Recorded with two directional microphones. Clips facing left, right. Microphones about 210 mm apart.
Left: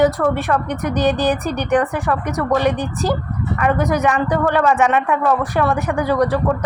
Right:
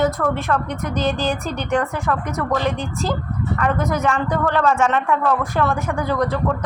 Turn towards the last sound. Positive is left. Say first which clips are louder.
# left 4 dB
turn(degrees=15)  # may be behind; listen again after turning